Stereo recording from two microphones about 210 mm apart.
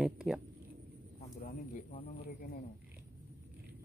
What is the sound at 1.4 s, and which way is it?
Bird, 40° left (ahead or behind).